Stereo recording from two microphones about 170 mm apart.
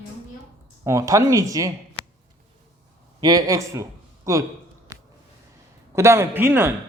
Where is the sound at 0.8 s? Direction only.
20° right (ahead or behind).